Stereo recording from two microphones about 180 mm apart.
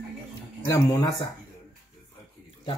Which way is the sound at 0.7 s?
15° left (ahead or behind).